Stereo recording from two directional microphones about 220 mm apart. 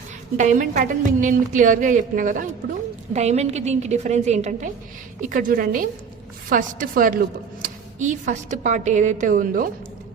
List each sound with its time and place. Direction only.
0.3 s a woman's voice: 35° right (ahead or behind)